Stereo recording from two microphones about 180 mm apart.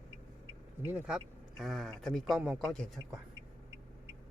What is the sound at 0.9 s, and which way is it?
Speech, 5° right (ahead or behind).